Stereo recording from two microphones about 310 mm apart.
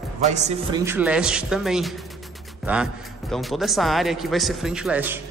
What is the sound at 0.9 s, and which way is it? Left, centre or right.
A man's voice, centre.